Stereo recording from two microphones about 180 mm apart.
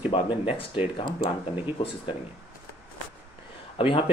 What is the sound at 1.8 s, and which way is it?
Speech, 25° left (ahead or behind).